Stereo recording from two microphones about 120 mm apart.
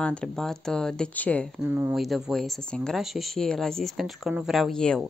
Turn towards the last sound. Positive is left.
turn(degrees=5)  # may be behind; listen again after turning